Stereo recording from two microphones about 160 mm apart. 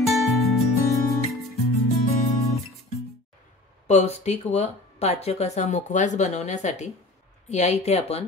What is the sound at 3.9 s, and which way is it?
Speech, 45° left (ahead or behind).